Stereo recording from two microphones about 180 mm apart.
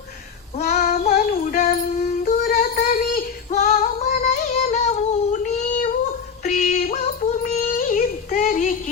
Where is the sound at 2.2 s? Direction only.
40° left (ahead or behind).